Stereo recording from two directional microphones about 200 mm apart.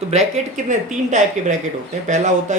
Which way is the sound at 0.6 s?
35° right (ahead or behind).